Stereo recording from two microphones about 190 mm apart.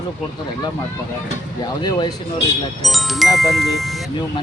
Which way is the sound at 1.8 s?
20° left (ahead or behind).